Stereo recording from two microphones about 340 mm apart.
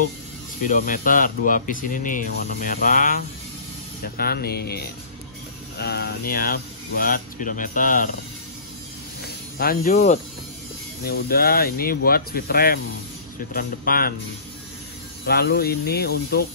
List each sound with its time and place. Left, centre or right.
0.6 s speech: left
9.2 s snake: left
11.1 s speech: left
15.2 s speech: left